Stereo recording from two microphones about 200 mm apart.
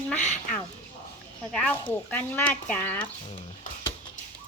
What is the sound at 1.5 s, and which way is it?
Speech, 5° left (ahead or behind).